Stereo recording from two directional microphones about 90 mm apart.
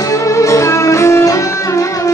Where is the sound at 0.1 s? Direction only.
35° left (ahead or behind).